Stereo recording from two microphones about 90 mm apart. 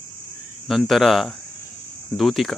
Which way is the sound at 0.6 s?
Centre (ahead or behind).